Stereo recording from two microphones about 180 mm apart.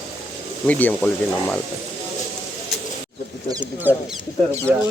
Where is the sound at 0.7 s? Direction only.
10° left (ahead or behind).